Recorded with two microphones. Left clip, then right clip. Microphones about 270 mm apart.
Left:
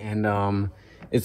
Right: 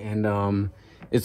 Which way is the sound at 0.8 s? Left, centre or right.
Centre.